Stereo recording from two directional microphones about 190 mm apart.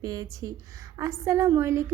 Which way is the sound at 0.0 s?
20° right (ahead or behind).